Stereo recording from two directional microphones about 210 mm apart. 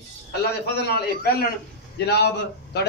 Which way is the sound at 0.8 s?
50° left (ahead or behind).